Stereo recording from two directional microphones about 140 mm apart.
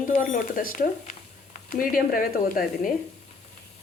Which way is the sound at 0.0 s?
65° left (ahead or behind).